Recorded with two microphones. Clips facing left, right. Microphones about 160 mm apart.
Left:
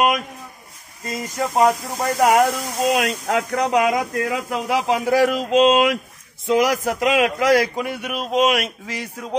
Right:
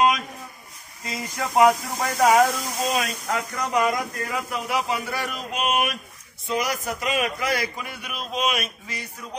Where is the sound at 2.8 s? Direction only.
75° left (ahead or behind).